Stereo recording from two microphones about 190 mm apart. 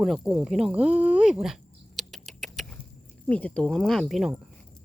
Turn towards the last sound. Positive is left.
turn(degrees=0)  # may be behind; listen again after turning